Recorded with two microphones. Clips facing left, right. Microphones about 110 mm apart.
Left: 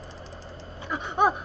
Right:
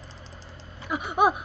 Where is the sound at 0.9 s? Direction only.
10° right (ahead or behind).